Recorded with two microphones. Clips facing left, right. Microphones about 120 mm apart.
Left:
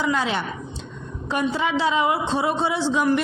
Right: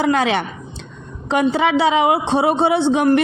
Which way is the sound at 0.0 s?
65° right (ahead or behind).